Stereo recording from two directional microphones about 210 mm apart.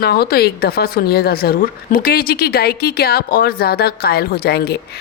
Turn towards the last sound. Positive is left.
turn(degrees=50)  # may be behind; listen again after turning